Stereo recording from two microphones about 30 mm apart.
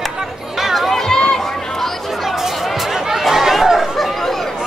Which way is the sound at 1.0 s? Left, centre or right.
Left.